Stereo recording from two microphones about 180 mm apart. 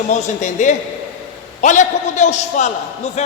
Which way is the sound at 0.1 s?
40° left (ahead or behind).